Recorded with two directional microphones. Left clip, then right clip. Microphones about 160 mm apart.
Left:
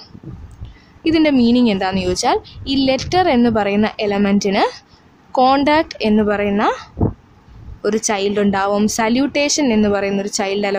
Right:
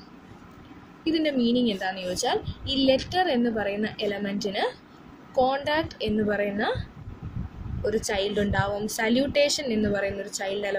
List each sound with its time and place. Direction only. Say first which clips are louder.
1.0 s a woman's voice: left 10 dB; 45° left (ahead or behind)
7.8 s a woman's voice: left 8 dB; 45° left (ahead or behind)